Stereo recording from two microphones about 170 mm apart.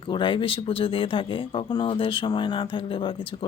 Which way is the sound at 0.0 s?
30° left (ahead or behind).